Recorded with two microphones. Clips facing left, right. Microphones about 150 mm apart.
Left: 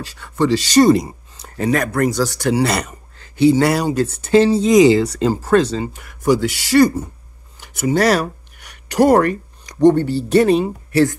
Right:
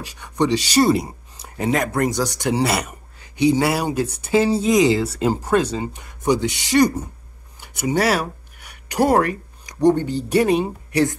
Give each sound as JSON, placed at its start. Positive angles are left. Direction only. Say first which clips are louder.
{"t": 0.0, "sound": "speech", "louder": "left 2 dB", "side_deg": -15}
{"t": 1.6, "sound": "speech", "louder": "left 3 dB", "side_deg": -20}
{"t": 2.7, "sound": "speech", "louder": "left 2 dB", "side_deg": -10}